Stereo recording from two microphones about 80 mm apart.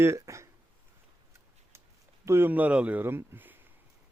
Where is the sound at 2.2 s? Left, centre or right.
Right.